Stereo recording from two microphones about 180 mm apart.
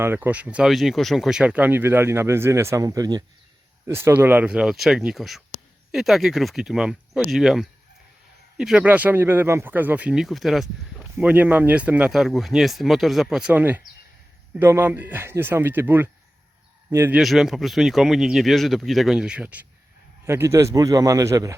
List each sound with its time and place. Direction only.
0.0 s speech: 10° right (ahead or behind)
17.2 s speech: centre (ahead or behind); by 21.5 s 15° right (ahead or behind)